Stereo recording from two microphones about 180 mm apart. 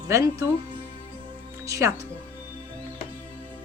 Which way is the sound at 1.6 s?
15° right (ahead or behind).